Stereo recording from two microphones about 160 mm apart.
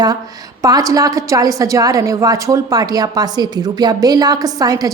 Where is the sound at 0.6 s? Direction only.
20° right (ahead or behind).